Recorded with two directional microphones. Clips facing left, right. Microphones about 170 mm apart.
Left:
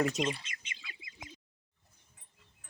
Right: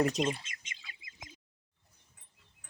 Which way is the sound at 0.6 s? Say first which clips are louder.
Left 2 dB; 45° right (ahead or behind).